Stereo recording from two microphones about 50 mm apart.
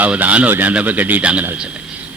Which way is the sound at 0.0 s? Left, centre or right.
Right.